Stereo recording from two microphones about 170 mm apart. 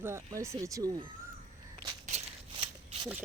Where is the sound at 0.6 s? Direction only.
20° right (ahead or behind).